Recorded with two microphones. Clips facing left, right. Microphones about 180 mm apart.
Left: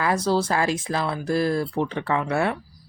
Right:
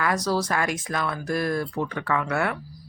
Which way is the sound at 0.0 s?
25° left (ahead or behind).